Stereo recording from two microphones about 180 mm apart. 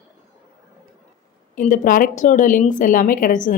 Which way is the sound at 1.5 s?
45° left (ahead or behind).